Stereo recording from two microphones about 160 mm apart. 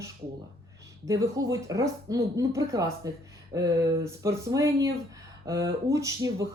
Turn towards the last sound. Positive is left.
turn(degrees=-20)  # may be behind; listen again after turning